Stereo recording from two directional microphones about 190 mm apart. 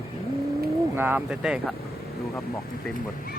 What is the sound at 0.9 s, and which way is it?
Speech, 10° right (ahead or behind).